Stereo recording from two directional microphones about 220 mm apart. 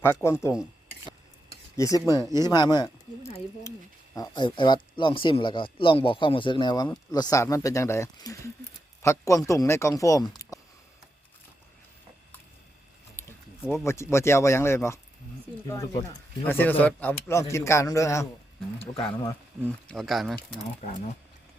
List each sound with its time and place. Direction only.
0.0 s speech: 10° left (ahead or behind)
1.7 s speech: 15° left (ahead or behind)
13.1 s a sound: 10° left (ahead or behind)
13.8 s speech: 10° left (ahead or behind)
19.9 s speech: centre (ahead or behind)